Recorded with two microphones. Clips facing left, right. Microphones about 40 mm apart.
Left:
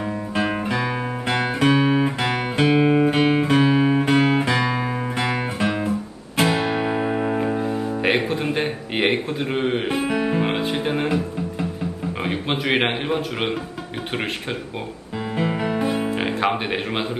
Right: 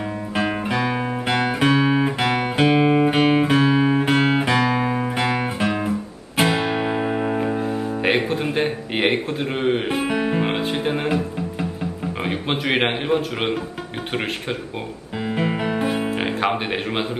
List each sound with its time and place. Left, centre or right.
0.3 s guitar: centre
0.8 s music: centre
3.5 s music: centre
4.2 s music: centre
15.3 s music: centre